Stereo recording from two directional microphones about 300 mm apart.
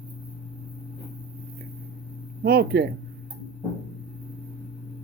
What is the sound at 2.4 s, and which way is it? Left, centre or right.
Speech, right.